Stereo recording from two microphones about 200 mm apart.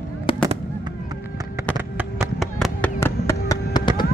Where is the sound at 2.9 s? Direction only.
15° left (ahead or behind).